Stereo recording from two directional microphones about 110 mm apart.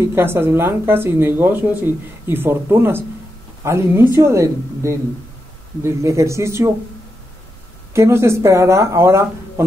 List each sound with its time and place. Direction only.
0.0 s speech: 20° right (ahead or behind)
7.9 s speech: 25° right (ahead or behind)